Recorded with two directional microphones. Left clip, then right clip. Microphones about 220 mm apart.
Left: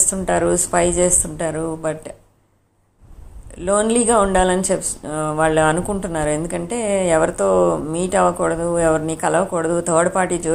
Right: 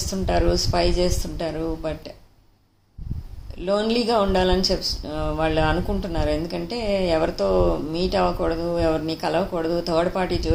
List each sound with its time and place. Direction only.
0.1 s speech: 20° left (ahead or behind)
3.6 s speech: 20° left (ahead or behind)